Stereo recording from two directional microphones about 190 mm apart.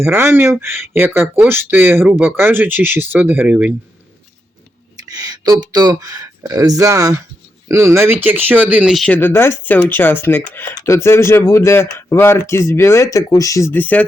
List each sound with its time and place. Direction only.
0.0 s speech: 15° right (ahead or behind)
5.0 s speech: 20° right (ahead or behind); by 14.0 s 10° left (ahead or behind)